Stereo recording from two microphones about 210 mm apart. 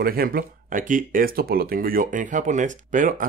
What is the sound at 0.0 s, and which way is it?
Speech, 45° right (ahead or behind).